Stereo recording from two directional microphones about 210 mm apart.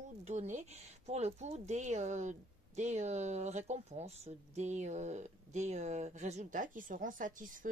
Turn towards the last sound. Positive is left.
turn(degrees=-40)  # may be behind; listen again after turning